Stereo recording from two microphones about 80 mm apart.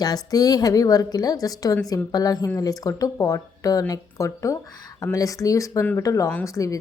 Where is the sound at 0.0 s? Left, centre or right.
Left.